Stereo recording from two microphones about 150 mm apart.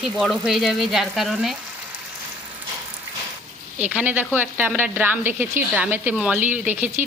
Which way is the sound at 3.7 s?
10° right (ahead or behind).